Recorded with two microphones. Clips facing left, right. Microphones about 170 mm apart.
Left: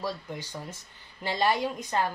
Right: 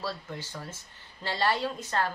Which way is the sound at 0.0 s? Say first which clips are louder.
Left 2 dB; 15° left (ahead or behind).